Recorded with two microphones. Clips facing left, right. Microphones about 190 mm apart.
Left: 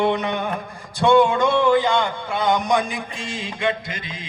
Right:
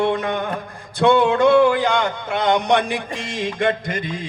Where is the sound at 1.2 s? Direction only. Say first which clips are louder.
Right 4 dB; 65° right (ahead or behind).